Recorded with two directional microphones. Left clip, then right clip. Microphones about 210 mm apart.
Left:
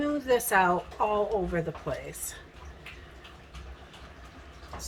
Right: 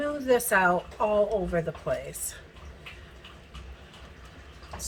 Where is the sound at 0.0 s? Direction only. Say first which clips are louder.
Right 1 dB; 20° left (ahead or behind).